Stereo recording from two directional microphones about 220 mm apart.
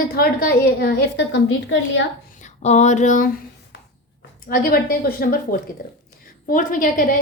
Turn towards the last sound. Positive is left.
turn(degrees=35)  # may be behind; listen again after turning